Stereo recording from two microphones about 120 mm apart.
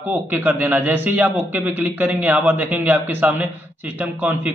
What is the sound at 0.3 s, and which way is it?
A man's voice, 15° right (ahead or behind).